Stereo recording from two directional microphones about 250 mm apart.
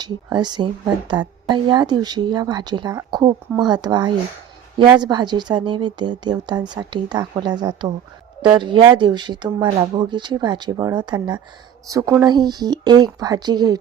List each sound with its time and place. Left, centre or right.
0.0 s speech: centre